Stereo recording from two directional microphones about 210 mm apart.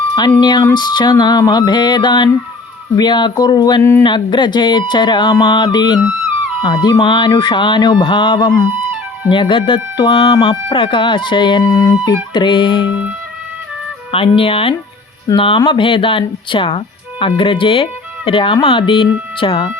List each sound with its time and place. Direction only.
0.2 s speech: 20° left (ahead or behind)
12.9 s music: 5° right (ahead or behind)
14.1 s speech: 25° left (ahead or behind)